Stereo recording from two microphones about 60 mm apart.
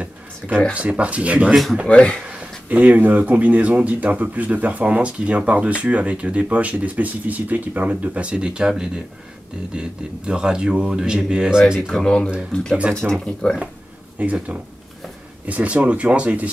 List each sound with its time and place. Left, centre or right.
0.4 s speech: centre
0.7 s speech: right
1.5 s speech: centre
1.9 s speech: centre
2.2 s speech: right
11.9 s speech: centre
14.1 s speech: right